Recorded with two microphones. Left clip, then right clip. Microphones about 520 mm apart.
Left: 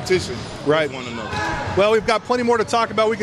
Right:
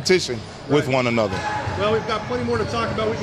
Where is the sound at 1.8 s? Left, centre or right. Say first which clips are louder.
Left 7 dB; left.